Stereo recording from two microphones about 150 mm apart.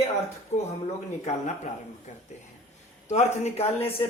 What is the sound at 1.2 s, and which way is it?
A man's voice, 55° left (ahead or behind).